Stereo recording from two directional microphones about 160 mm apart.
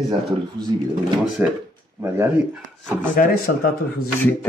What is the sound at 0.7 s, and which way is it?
Speech, 30° right (ahead or behind).